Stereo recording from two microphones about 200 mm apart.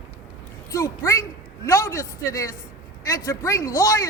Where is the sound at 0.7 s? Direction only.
15° left (ahead or behind).